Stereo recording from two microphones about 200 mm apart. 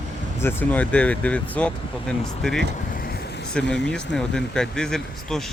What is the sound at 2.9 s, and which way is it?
Vehicle, 50° left (ahead or behind).